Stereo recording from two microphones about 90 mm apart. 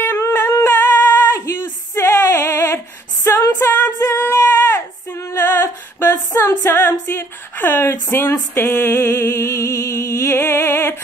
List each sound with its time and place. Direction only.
0.0 s a sound: 30° left (ahead or behind)
1.4 s female singing: 30° left (ahead or behind)
3.3 s music: 35° left (ahead or behind)
4.0 s female singing: 30° left (ahead or behind)
6.9 s a woman's voice: 30° left (ahead or behind)
7.9 s a sound: 25° left (ahead or behind)